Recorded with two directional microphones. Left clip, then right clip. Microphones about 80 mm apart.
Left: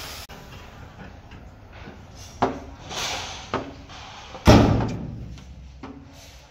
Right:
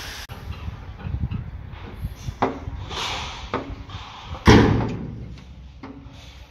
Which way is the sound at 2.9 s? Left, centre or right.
Left.